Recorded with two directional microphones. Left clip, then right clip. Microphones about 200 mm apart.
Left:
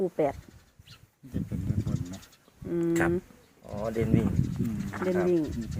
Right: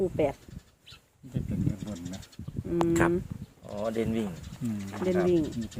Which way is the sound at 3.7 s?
25° left (ahead or behind).